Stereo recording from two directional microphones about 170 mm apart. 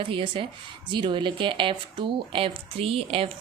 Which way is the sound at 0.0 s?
30° right (ahead or behind).